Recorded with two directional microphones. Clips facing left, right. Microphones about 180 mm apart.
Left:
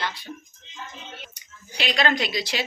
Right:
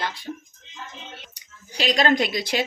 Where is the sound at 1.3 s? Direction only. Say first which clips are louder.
Right 4 dB; 40° right (ahead or behind).